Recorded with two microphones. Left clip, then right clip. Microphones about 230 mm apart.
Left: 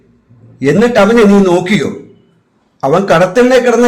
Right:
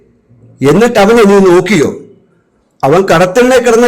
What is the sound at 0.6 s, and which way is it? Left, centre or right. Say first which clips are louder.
A man's voice: right 2 dB; right.